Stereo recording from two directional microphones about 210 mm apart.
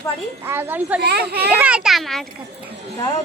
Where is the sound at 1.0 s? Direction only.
50° right (ahead or behind).